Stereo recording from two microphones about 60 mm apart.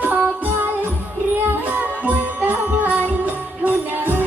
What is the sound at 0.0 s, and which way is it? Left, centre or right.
Music, right.